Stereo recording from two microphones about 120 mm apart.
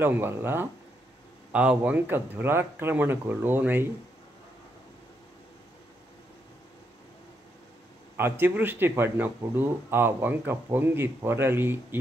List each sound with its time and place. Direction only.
0.0 s speech: 20° right (ahead or behind)
8.2 s speech: 15° right (ahead or behind)